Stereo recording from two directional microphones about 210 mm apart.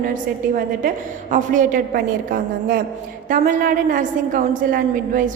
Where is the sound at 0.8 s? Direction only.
35° right (ahead or behind).